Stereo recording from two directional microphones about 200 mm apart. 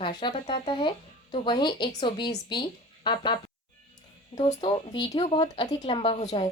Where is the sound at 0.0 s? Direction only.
25° left (ahead or behind).